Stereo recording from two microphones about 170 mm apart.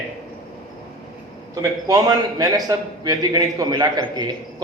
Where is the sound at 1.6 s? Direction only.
20° right (ahead or behind).